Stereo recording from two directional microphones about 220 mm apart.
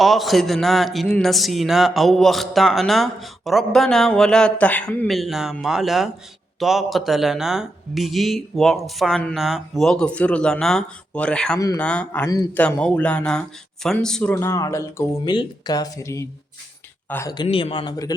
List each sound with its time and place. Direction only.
0.0 s speech: centre (ahead or behind)
11.6 s speech: 15° left (ahead or behind)
11.9 s speech: 5° left (ahead or behind)
12.2 s speech: 15° left (ahead or behind)
12.6 s speech: 5° left (ahead or behind)